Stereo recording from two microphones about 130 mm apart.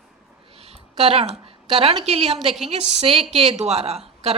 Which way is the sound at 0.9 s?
50° right (ahead or behind).